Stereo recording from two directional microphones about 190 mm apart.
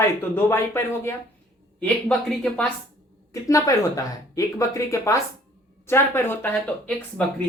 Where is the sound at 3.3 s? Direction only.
15° left (ahead or behind).